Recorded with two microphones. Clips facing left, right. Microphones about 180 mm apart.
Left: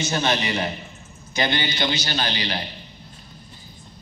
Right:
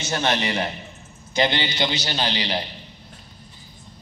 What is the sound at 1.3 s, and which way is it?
A man's voice, 25° right (ahead or behind).